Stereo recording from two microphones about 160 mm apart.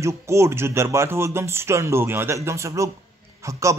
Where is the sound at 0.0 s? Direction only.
15° right (ahead or behind).